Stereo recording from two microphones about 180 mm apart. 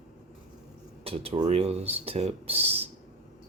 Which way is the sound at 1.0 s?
35° right (ahead or behind).